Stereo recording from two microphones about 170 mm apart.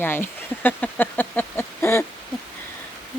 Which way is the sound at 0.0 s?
10° left (ahead or behind).